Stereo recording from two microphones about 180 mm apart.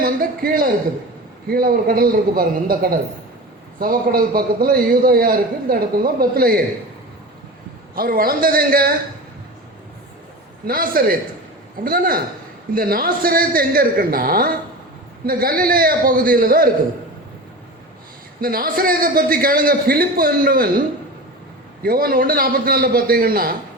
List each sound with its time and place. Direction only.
0.0 s a man's voice: 55° right (ahead or behind)
7.9 s a man's voice: 55° right (ahead or behind)
10.7 s a man's voice: 55° right (ahead or behind)
18.3 s a man's voice: 55° right (ahead or behind)
21.8 s a man's voice: 55° right (ahead or behind)